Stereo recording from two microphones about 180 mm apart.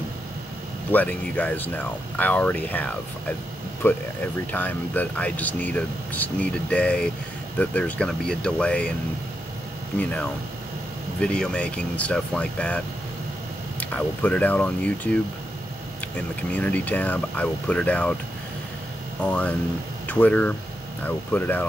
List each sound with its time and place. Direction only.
0.9 s speech: 10° left (ahead or behind)
4.5 s speech: 10° left (ahead or behind)
9.9 s speech: 10° left (ahead or behind)
16.5 s speech: 10° left (ahead or behind)
19.2 s speech: 5° left (ahead or behind)